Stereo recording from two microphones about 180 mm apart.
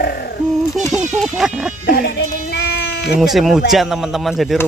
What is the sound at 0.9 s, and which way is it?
Speech, centre (ahead or behind).